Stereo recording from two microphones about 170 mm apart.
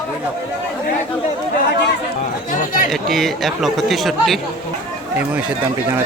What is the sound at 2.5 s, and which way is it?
Speech, 50° left (ahead or behind).